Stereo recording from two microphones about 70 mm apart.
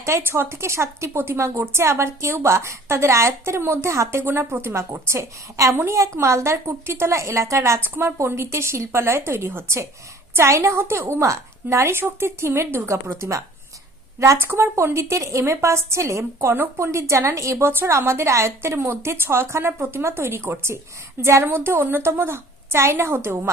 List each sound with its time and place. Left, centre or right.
0.0 s a woman's voice: right